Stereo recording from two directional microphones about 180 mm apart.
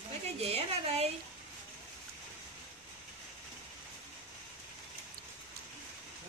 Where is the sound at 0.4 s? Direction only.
35° right (ahead or behind).